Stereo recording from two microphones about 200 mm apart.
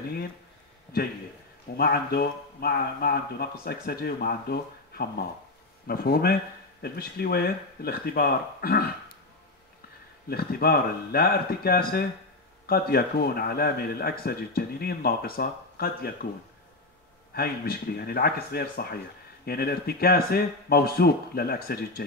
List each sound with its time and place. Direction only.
1.8 s speech: 50° left (ahead or behind)
10.3 s speech: 50° left (ahead or behind)
17.3 s speech: 50° left (ahead or behind)